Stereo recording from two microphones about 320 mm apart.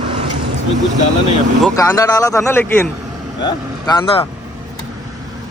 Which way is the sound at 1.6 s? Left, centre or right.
Centre.